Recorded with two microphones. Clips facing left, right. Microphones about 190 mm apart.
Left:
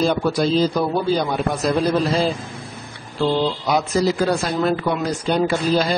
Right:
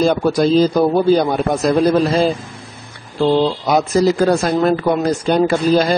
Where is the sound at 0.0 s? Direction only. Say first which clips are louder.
Right 4 dB; 45° right (ahead or behind).